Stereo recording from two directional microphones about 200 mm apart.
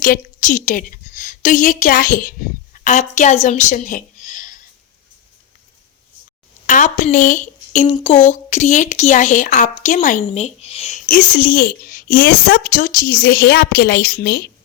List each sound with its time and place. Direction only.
0.0 s a woman's voice: 40° left (ahead or behind)
6.7 s speech: 40° left (ahead or behind)